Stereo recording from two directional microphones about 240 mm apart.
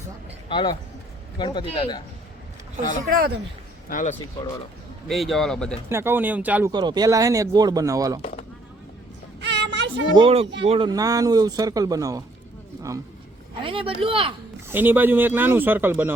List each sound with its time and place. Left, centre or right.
0.4 s speech: centre
3.1 s speech: right
3.8 s speech: left
5.0 s speech: centre
5.9 s speech: centre
8.2 s speech: left
9.4 s music: right
10.2 s speech: right
13.6 s speech: right
14.7 s speech: centre